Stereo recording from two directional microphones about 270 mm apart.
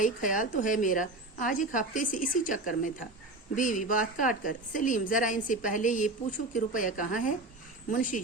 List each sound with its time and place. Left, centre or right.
0.0 s a woman's voice: left